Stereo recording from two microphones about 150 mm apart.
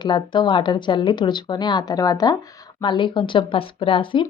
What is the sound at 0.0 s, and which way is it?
A woman's voice, 30° left (ahead or behind).